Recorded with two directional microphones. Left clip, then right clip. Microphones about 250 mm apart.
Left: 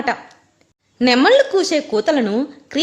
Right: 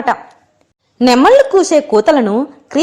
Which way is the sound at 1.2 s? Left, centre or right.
Centre.